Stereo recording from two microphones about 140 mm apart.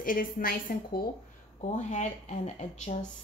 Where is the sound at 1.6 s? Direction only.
55° left (ahead or behind).